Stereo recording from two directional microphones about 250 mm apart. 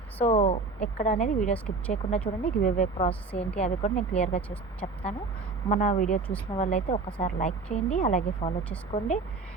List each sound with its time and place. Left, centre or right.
0.3 s speech: left
4.4 s speech: centre
5.6 s speech: left